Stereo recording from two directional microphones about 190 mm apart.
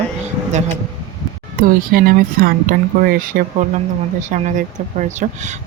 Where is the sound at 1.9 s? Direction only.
50° right (ahead or behind).